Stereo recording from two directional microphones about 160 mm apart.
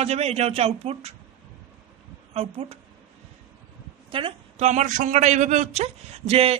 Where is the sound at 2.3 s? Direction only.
35° right (ahead or behind).